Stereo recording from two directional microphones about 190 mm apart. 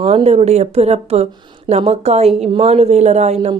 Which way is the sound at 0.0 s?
30° right (ahead or behind).